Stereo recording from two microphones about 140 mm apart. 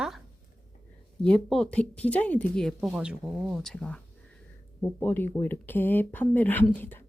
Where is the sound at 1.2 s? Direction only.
5° left (ahead or behind).